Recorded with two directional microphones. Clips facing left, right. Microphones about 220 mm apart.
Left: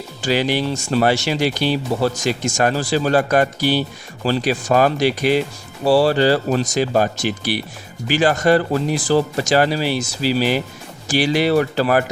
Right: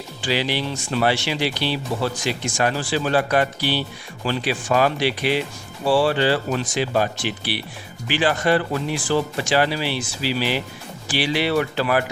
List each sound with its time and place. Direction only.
0.2 s speech: 45° left (ahead or behind)